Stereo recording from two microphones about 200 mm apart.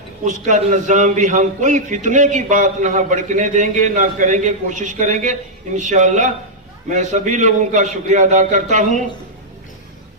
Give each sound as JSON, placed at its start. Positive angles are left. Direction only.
{"t": 0.3, "sound": "a man's voice", "side_deg": -40}